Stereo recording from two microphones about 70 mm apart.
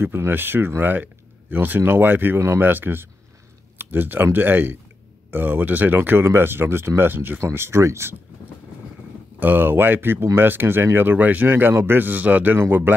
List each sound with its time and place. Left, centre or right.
0.0 s speech: right
9.4 s speech: right